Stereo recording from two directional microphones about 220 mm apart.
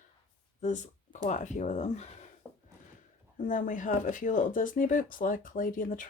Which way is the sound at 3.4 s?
35° left (ahead or behind).